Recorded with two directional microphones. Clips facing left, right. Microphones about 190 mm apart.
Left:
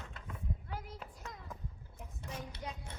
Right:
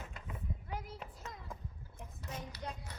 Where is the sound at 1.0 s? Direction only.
5° right (ahead or behind).